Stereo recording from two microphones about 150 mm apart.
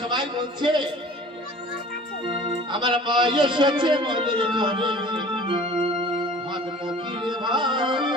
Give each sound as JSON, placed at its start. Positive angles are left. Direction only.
{"t": 0.0, "sound": "speech", "side_deg": -30}
{"t": 2.2, "sound": "speech", "side_deg": -35}
{"t": 7.2, "sound": "music", "side_deg": -30}